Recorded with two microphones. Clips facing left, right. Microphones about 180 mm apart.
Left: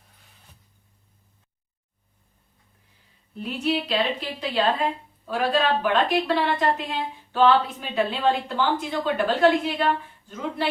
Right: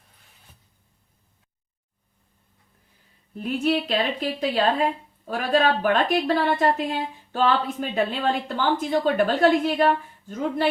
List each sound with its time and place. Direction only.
3.3 s a woman's voice: 45° right (ahead or behind)